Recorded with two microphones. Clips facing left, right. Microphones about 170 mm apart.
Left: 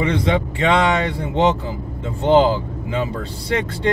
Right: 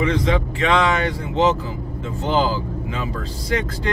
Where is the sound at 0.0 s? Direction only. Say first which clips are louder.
Left 1 dB; 30° left (ahead or behind).